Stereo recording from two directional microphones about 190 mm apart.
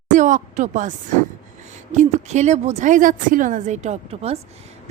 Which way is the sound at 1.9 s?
35° right (ahead or behind).